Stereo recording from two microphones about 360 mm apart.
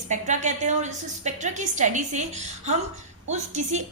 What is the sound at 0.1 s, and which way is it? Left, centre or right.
A woman's voice, centre.